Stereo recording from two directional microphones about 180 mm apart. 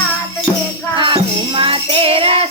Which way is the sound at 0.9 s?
25° right (ahead or behind).